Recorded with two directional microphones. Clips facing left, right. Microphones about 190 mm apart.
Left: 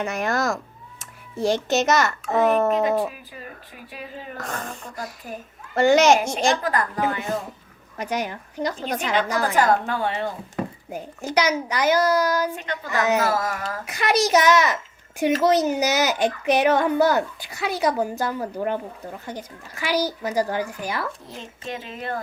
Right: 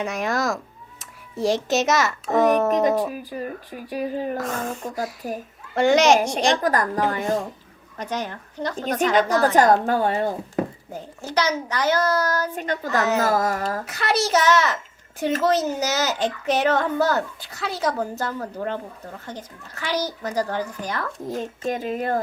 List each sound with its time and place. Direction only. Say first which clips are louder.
0.0 s a child's voice: even; centre (ahead or behind)
3.1 s speech: right 9 dB; 40° right (ahead or behind)
4.4 s a child's voice: right 5 dB; centre (ahead or behind)
5.2 s speech: right 5 dB; 40° right (ahead or behind)
5.7 s a child's voice: even; centre (ahead or behind)
6.6 s speech: right 3 dB; 40° right (ahead or behind)
7.9 s speech: left 2 dB; 10° left (ahead or behind)
9.6 s speech: right 2 dB; 45° right (ahead or behind)
10.9 s speech: left 2 dB; 15° left (ahead or behind)
12.5 s speech: right 3 dB; 40° right (ahead or behind)
13.8 s speech: left 7 dB; 15° left (ahead or behind)
21.2 s speech: right 8 dB; 45° right (ahead or behind)